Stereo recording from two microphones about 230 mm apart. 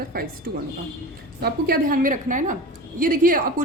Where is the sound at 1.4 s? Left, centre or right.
Right.